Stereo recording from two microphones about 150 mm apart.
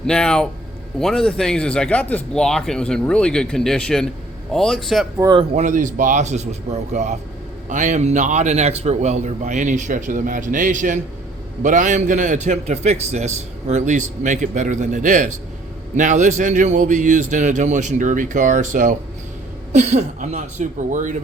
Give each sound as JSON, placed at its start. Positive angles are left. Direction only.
{"t": 0.1, "sound": "speech", "side_deg": 5}
{"t": 5.1, "sound": "speech", "side_deg": -20}
{"t": 5.5, "sound": "a man's voice", "side_deg": -55}